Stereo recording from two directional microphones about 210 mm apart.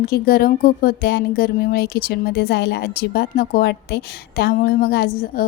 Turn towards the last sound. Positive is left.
turn(degrees=45)  # may be behind; listen again after turning